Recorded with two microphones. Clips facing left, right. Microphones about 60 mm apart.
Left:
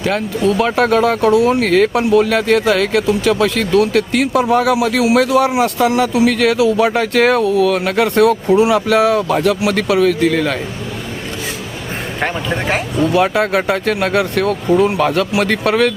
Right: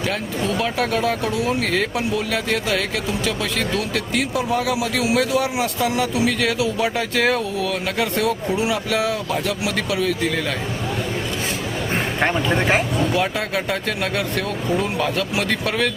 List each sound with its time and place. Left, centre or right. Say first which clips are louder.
0.6 s speech: left 8 dB; left
12.2 s speech: left 1 dB; centre
13.1 s speech: left 8 dB; left